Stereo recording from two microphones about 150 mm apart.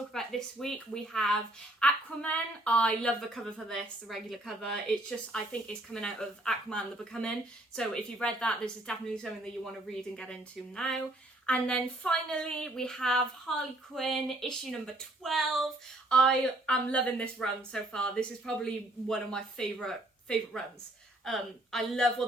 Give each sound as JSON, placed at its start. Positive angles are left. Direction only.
{"t": 0.1, "sound": "a woman's voice", "side_deg": 0}
{"t": 10.8, "sound": "a woman's voice", "side_deg": 5}